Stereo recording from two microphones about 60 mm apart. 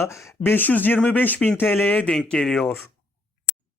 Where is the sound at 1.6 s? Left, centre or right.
Left.